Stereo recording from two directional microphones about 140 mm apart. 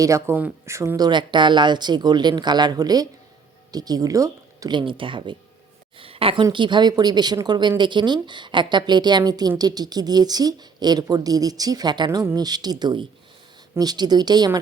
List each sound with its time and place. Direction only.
0.0 s a woman's voice: 20° right (ahead or behind)